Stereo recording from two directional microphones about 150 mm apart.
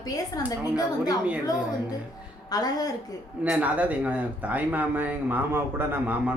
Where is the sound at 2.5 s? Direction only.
25° left (ahead or behind).